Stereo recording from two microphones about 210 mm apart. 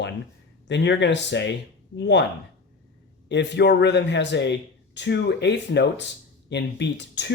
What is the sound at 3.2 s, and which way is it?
Speech, 55° left (ahead or behind).